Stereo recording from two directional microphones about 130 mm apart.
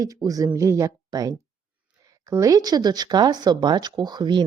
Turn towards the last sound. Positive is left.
turn(degrees=-35)  # may be behind; listen again after turning